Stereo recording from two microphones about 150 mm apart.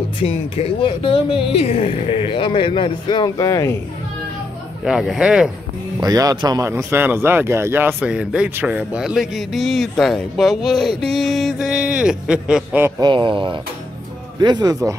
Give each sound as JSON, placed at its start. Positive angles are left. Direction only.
{"t": 0.2, "sound": "speech", "side_deg": 40}
{"t": 4.8, "sound": "speech", "side_deg": -5}
{"t": 5.9, "sound": "speech", "side_deg": -25}
{"t": 6.7, "sound": "speech", "side_deg": -15}
{"t": 13.0, "sound": "speech", "side_deg": -30}